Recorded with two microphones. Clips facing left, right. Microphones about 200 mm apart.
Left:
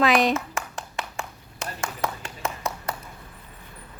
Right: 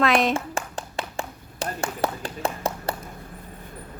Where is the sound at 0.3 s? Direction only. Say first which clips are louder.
Right 2 dB; 30° right (ahead or behind).